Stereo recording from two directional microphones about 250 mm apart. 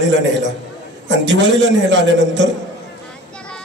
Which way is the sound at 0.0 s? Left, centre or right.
Right.